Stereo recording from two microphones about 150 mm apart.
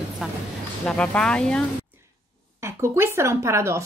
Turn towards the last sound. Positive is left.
turn(degrees=-20)  # may be behind; listen again after turning